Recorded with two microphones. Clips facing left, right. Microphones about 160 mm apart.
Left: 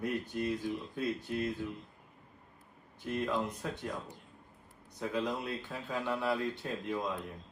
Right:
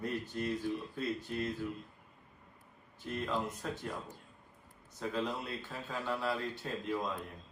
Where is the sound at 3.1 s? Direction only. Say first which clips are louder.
Left 3 dB; 20° left (ahead or behind).